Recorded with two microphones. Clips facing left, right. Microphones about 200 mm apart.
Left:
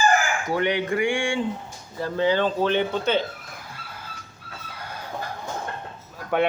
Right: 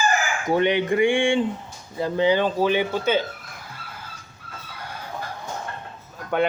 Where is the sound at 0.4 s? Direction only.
20° right (ahead or behind).